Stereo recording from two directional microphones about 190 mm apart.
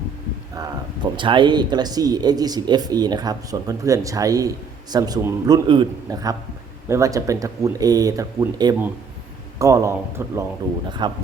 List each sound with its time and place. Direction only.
0.5 s speech: 20° right (ahead or behind)